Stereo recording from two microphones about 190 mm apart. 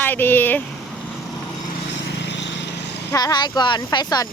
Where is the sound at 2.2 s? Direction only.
70° left (ahead or behind).